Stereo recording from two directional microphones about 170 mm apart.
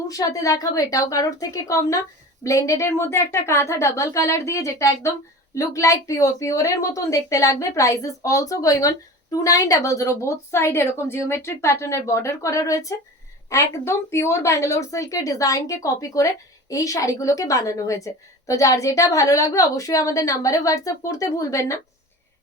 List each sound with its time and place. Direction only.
0.1 s speech: 20° left (ahead or behind)